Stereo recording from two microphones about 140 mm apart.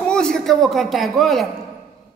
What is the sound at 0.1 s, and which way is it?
A man's voice, 5° left (ahead or behind).